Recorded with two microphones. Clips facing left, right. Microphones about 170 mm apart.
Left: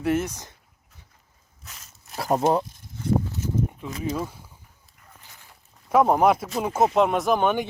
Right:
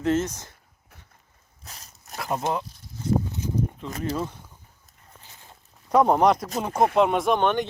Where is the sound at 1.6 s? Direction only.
35° right (ahead or behind).